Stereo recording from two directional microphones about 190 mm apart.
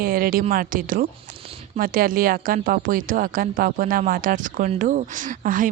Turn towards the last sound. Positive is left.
turn(degrees=-45)  # may be behind; listen again after turning